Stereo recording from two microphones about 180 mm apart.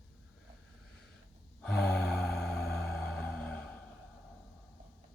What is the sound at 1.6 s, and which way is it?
Music, 5° left (ahead or behind).